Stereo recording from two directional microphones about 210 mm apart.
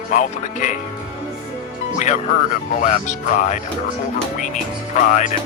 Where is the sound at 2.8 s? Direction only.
35° left (ahead or behind).